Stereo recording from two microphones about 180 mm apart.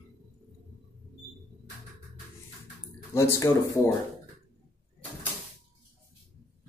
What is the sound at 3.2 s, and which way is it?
Speech, 15° left (ahead or behind).